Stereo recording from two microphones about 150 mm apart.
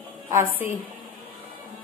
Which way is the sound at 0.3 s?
15° right (ahead or behind).